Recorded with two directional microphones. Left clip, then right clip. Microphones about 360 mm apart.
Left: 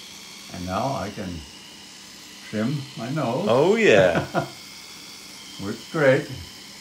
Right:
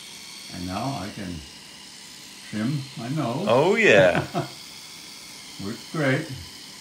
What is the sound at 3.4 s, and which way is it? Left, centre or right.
Speech, centre.